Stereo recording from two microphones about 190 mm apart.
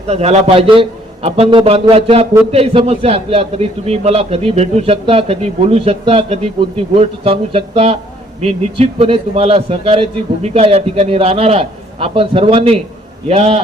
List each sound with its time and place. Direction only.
0.1 s a man's voice: 35° right (ahead or behind)